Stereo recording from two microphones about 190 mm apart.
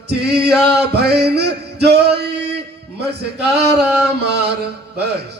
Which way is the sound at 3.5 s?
60° right (ahead or behind).